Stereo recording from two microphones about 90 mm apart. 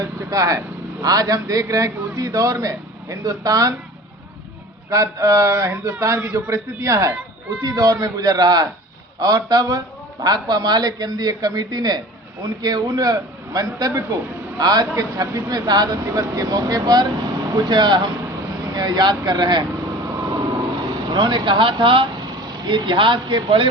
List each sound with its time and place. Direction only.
0.0 s vehicle: 35° right (ahead or behind)
1.0 s speech: 45° right (ahead or behind)
4.9 s speech: 40° right (ahead or behind)
7.6 s speech: 45° right (ahead or behind)
20.1 s vehicle: 40° right (ahead or behind)
21.1 s speech: 60° right (ahead or behind)
22.4 s speech: 55° right (ahead or behind)